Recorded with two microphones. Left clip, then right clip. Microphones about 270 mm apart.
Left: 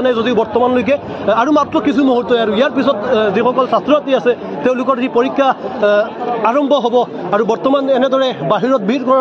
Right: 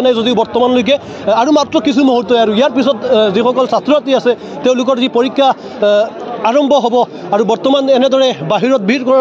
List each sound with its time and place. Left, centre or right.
0.0 s a man's voice: right